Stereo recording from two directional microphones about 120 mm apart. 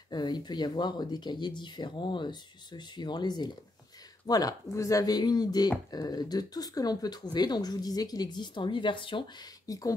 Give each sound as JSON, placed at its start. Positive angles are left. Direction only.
{"t": 0.1, "sound": "speech", "side_deg": 35}
{"t": 9.7, "sound": "speech", "side_deg": 30}